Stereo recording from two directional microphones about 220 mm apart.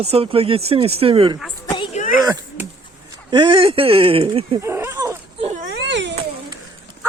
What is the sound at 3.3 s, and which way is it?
Speech, 20° right (ahead or behind).